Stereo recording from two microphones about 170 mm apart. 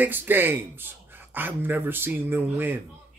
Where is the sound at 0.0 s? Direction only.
10° right (ahead or behind).